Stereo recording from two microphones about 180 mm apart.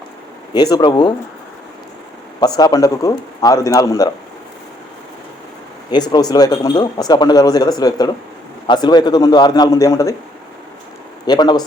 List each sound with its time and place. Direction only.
0.5 s speech: 20° left (ahead or behind)
2.4 s speech: 20° left (ahead or behind)
5.9 s speech: 25° left (ahead or behind)
11.3 s speech: 25° left (ahead or behind)